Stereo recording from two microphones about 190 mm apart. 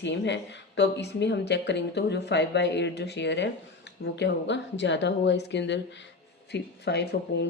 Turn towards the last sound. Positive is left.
turn(degrees=60)  # may be behind; listen again after turning